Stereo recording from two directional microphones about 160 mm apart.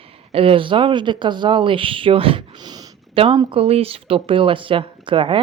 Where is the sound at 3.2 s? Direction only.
35° right (ahead or behind).